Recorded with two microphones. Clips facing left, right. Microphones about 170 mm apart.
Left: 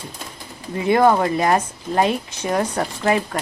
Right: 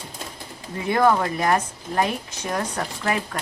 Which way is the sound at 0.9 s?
20° left (ahead or behind).